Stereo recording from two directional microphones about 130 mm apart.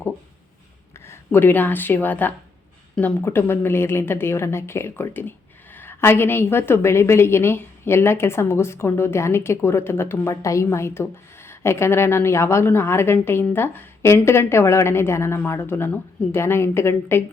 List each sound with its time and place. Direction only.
0.9 s a woman's voice: 20° left (ahead or behind)